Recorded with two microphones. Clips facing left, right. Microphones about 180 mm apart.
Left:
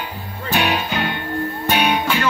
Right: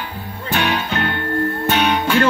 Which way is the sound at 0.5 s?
10° left (ahead or behind).